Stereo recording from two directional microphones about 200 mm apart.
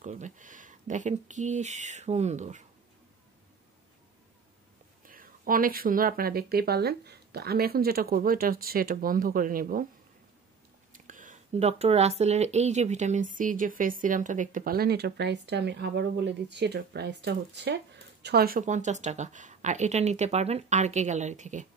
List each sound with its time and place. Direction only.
0.0 s speech: 35° right (ahead or behind)
5.0 s speech: 45° right (ahead or behind)
10.9 s speech: 40° right (ahead or behind)